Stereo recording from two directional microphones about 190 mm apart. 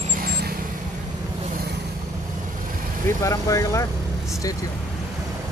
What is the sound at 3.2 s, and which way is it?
Speech, 15° left (ahead or behind).